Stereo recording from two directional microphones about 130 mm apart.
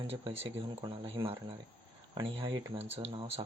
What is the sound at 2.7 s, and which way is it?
Speech, 50° right (ahead or behind).